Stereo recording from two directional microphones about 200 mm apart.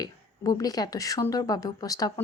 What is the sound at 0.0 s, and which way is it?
A woman's voice, 20° left (ahead or behind).